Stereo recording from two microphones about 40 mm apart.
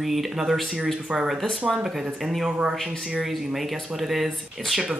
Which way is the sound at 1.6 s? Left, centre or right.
Centre.